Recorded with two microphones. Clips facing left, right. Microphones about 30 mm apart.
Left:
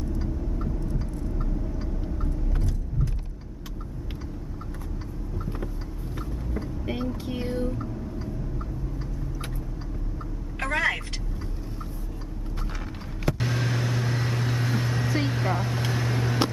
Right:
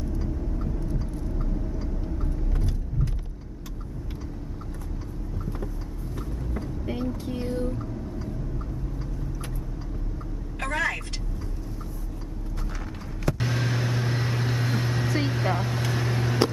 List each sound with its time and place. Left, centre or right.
0.6 s vehicle: centre
6.9 s vehicle: left
10.7 s vehicle: left
13.3 s vehicle: centre